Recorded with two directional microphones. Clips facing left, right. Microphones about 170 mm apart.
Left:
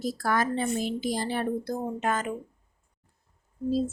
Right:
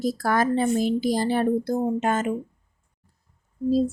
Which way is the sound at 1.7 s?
25° right (ahead or behind).